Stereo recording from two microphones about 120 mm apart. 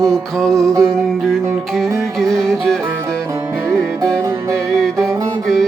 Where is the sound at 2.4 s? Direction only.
5° left (ahead or behind).